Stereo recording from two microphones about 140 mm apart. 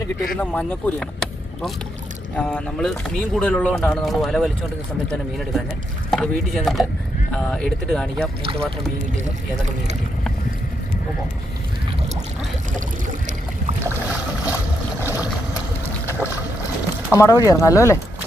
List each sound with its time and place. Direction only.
0.3 s speech: 10° left (ahead or behind)
13.8 s boat: 10° right (ahead or behind)
17.1 s speech: 20° left (ahead or behind)